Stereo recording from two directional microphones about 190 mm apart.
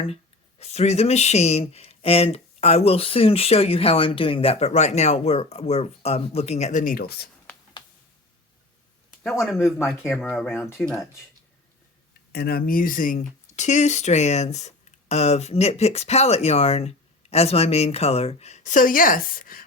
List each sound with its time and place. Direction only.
0.6 s speech: 35° left (ahead or behind); by 7.3 s 50° left (ahead or behind)
9.4 s speech: centre (ahead or behind)
10.2 s speech: 10° left (ahead or behind)
12.3 s speech: 55° left (ahead or behind)